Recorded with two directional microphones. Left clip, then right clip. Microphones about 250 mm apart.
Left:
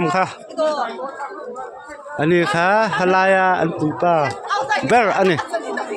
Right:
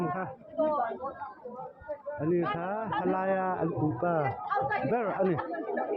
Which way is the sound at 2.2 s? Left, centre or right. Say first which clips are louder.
Left 15 dB; left.